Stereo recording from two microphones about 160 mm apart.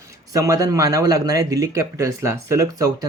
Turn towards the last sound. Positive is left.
turn(degrees=-20)  # may be behind; listen again after turning